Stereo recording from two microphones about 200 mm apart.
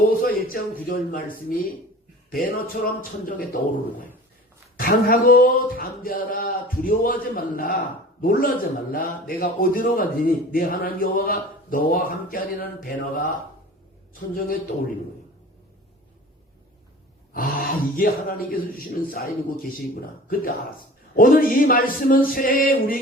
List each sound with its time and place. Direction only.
0.1 s a sound: 45° left (ahead or behind)
0.9 s a man's voice: 45° left (ahead or behind)
4.8 s a man's voice: 45° left (ahead or behind)
17.3 s a man's voice: 45° left (ahead or behind)
21.2 s a man's voice: 45° left (ahead or behind)